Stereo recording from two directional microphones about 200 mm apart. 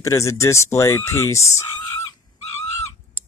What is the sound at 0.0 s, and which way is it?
Speech, 15° left (ahead or behind).